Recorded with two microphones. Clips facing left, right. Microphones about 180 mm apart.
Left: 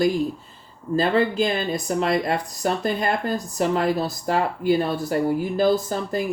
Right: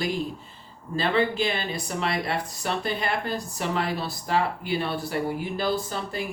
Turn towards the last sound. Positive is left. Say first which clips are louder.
# left 6 dB
turn(degrees=45)  # may be behind; listen again after turning